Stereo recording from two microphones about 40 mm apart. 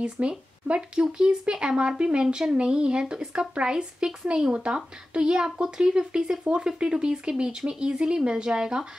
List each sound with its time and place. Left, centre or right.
0.0 s speech: right